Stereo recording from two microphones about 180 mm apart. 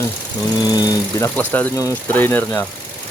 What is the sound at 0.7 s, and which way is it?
Speech, 20° left (ahead or behind).